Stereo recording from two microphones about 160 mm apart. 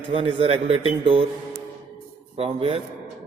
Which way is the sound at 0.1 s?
35° right (ahead or behind).